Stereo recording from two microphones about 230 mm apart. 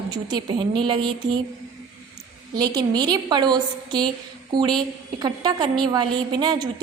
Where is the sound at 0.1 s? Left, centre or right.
Centre.